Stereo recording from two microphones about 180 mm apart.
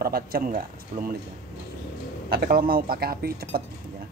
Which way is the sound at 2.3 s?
55° right (ahead or behind).